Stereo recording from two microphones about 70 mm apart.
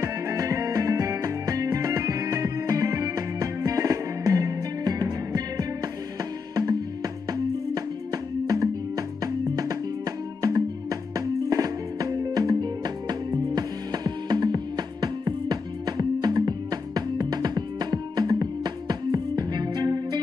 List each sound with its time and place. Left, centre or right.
0.0 s music: right
12.8 s music: right